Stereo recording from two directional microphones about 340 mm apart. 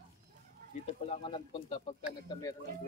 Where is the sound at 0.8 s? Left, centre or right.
Centre.